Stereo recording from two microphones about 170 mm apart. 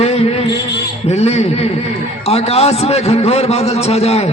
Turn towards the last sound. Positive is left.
turn(degrees=40)  # may be behind; listen again after turning